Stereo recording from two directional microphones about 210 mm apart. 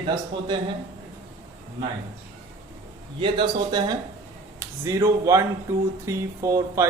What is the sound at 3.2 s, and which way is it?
A man's voice, 25° right (ahead or behind).